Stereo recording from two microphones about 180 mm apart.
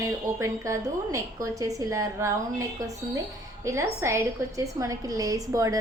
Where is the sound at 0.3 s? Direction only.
15° right (ahead or behind).